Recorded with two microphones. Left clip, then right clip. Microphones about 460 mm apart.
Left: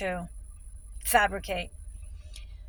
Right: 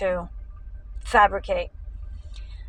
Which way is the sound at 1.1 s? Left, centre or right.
Left.